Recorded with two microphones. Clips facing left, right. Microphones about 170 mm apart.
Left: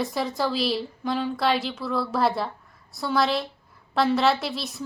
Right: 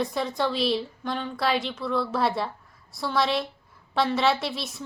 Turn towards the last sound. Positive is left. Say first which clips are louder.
# left 1 dB
turn(degrees=0)  # may be behind; listen again after turning